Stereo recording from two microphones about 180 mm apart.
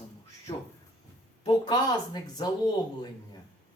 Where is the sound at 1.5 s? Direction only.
25° left (ahead or behind).